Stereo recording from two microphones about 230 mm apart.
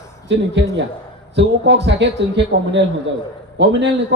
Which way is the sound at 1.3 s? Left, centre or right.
Right.